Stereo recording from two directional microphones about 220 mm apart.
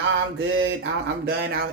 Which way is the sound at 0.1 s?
60° right (ahead or behind).